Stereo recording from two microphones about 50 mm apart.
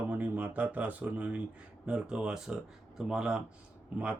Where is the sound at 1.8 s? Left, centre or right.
Centre.